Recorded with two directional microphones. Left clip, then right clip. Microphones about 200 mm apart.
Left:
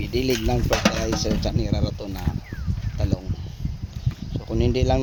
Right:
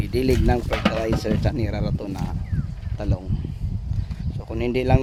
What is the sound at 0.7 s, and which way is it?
Speech, 55° left (ahead or behind).